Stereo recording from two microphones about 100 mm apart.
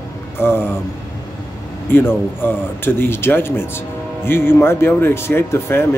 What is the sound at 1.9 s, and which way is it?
Speech, 20° left (ahead or behind).